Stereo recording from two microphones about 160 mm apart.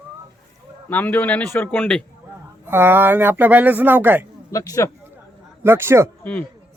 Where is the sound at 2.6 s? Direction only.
15° right (ahead or behind).